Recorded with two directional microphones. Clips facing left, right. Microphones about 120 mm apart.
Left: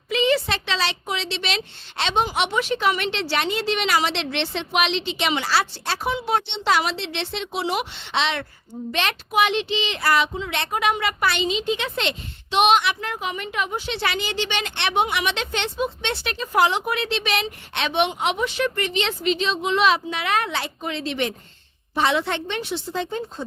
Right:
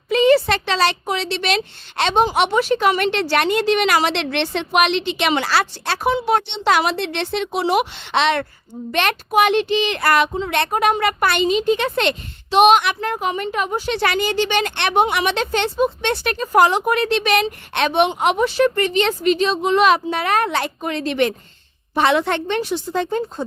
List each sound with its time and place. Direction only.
0.1 s a woman's voice: 45° right (ahead or behind)